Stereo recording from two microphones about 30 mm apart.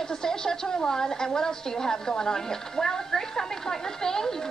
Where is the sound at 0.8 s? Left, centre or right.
Centre.